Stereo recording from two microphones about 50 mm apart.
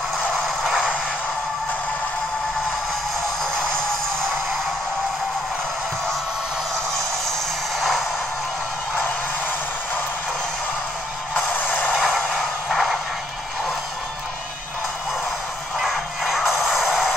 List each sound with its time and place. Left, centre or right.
11.3 s music: left
12.0 s a sound: centre
15.8 s music: centre